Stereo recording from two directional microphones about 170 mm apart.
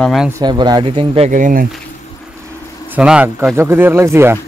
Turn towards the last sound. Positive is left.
turn(degrees=-15)  # may be behind; listen again after turning